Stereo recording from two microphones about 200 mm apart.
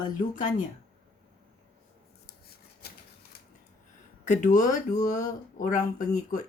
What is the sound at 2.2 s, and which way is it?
Rub, 50° left (ahead or behind).